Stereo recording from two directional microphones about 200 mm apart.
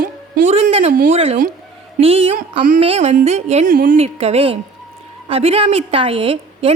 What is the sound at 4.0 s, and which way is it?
A woman's voice, 30° right (ahead or behind).